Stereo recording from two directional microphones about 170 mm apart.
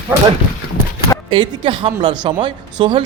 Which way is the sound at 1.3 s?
30° right (ahead or behind).